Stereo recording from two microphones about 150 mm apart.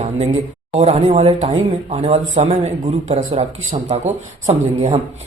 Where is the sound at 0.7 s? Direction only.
40° right (ahead or behind).